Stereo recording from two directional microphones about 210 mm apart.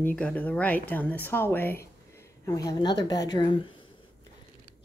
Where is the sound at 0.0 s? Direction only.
5° left (ahead or behind); by 3.8 s 20° left (ahead or behind).